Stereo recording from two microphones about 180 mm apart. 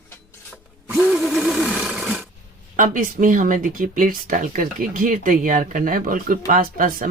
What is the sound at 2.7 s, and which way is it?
Speech, 50° right (ahead or behind).